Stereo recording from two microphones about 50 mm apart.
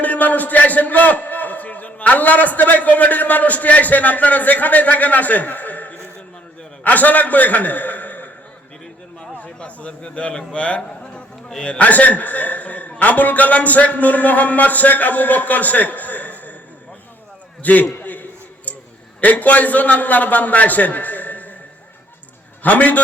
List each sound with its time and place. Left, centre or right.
0.0 s a man's voice: left
9.4 s a man's voice: left
17.6 s a man's voice: left
18.0 s a sound: left
19.2 s a man's voice: left
22.6 s a man's voice: left